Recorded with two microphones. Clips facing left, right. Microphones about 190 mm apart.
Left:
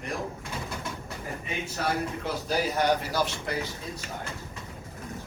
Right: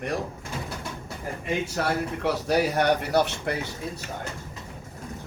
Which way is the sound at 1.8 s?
70° right (ahead or behind).